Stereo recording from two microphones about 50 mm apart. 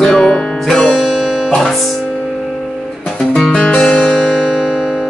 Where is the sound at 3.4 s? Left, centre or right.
Centre.